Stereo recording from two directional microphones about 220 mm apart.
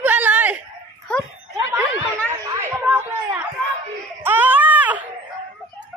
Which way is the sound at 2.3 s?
10° right (ahead or behind).